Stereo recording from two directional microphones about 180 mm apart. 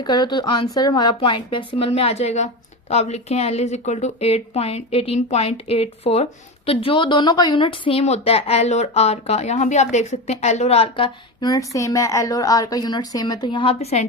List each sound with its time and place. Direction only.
0.0 s a woman's voice: 25° left (ahead or behind)